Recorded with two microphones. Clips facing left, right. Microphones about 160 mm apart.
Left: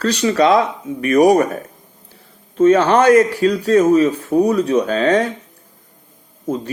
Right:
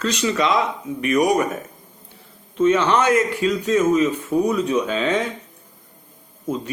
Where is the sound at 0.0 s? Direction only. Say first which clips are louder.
Left 6 dB; 35° left (ahead or behind).